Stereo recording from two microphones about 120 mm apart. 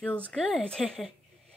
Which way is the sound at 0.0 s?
10° left (ahead or behind).